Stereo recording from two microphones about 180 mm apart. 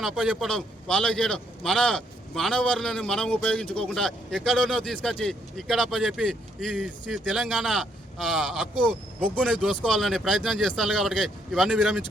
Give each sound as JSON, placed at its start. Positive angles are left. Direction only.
{"t": 0.0, "sound": "a man's voice", "side_deg": 0}
{"t": 8.7, "sound": "speech", "side_deg": 25}
{"t": 9.2, "sound": "a man's voice", "side_deg": 5}